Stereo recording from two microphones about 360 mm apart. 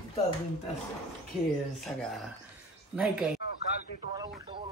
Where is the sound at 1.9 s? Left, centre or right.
Centre.